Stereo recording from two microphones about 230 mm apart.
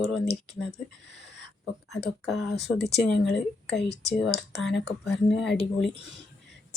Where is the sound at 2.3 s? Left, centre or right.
Centre.